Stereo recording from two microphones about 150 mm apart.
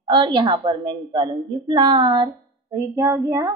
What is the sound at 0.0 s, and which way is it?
A woman's voice, 35° right (ahead or behind).